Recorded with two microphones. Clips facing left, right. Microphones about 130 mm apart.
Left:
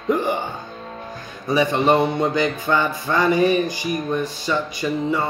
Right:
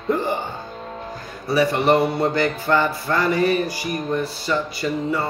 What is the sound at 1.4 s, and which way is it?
Music, 20° left (ahead or behind).